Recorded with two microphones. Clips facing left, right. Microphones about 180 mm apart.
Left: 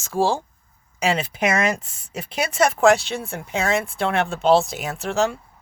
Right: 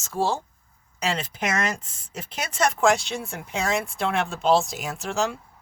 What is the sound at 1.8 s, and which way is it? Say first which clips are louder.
Speech: left 4 dB; 10° left (ahead or behind).